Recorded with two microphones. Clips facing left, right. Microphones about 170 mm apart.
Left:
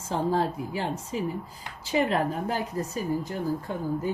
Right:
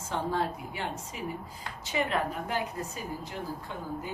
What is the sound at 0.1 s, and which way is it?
Speech, 35° left (ahead or behind).